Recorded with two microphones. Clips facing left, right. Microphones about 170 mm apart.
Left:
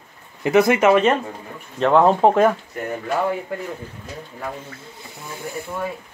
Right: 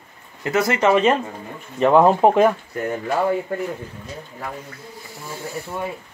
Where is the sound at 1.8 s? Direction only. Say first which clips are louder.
Right 1 dB; 10° right (ahead or behind).